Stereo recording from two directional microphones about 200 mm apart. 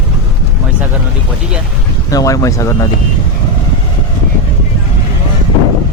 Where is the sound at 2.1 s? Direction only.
15° left (ahead or behind).